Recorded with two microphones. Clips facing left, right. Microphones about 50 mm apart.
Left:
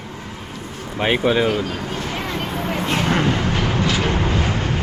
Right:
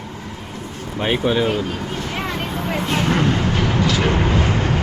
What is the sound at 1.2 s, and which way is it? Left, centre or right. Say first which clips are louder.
Speech: left 1 dB; centre.